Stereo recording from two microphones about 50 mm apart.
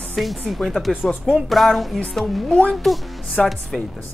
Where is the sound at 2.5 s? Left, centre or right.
Left.